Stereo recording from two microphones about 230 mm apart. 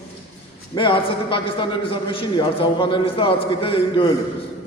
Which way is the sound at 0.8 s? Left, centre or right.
Left.